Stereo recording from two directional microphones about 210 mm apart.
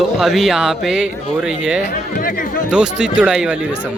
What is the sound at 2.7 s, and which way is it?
Speech, 5° right (ahead or behind).